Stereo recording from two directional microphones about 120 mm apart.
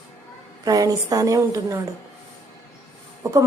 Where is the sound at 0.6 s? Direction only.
30° right (ahead or behind).